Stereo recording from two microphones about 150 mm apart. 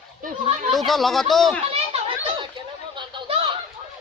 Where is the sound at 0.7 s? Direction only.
Centre (ahead or behind).